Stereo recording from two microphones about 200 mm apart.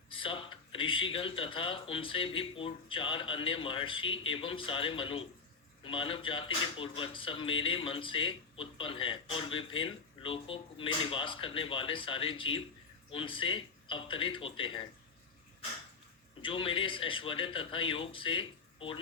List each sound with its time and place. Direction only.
0.1 s speech: 25° left (ahead or behind)
16.4 s speech: 25° left (ahead or behind)